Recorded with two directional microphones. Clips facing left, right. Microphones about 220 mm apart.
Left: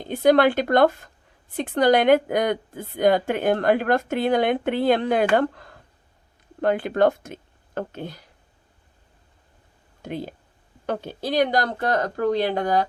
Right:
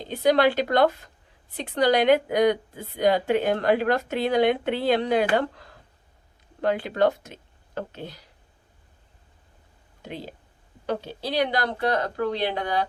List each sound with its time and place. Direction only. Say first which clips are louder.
0.0 s a woman's voice: left 3 dB; 50° left (ahead or behind)
10.0 s a woman's voice: left 5 dB; 50° left (ahead or behind)